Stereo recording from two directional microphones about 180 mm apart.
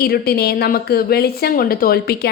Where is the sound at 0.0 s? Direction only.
60° left (ahead or behind).